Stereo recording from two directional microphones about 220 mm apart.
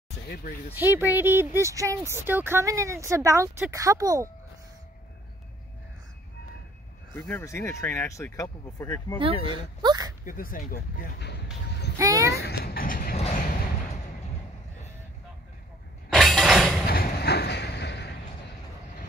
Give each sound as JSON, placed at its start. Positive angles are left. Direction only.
{"t": 0.3, "sound": "speech", "side_deg": 40}
{"t": 0.9, "sound": "speech", "side_deg": -10}
{"t": 7.2, "sound": "speech", "side_deg": 10}
{"t": 9.2, "sound": "speech", "side_deg": -25}
{"t": 10.2, "sound": "speech", "side_deg": 40}
{"t": 12.0, "sound": "speech", "side_deg": -15}
{"t": 12.3, "sound": "a sound", "side_deg": 45}
{"t": 16.1, "sound": "shatter", "side_deg": 0}
{"t": 16.8, "sound": "a sound", "side_deg": 45}